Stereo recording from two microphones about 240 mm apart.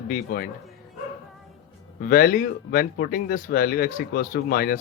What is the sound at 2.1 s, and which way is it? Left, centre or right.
Speech, left.